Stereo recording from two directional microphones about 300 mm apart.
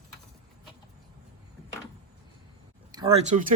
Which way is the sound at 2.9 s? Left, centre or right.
Centre.